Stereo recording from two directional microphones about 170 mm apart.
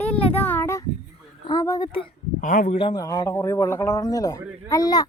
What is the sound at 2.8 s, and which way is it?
Speech, 30° left (ahead or behind).